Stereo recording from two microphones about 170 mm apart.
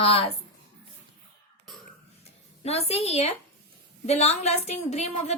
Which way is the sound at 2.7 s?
35° left (ahead or behind).